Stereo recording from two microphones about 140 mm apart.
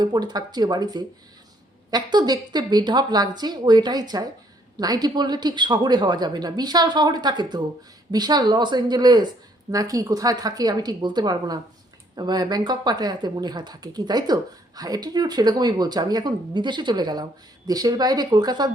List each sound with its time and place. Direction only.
0.0 s speech: 30° right (ahead or behind)